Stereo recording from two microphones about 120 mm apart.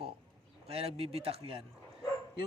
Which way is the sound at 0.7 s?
55° right (ahead or behind).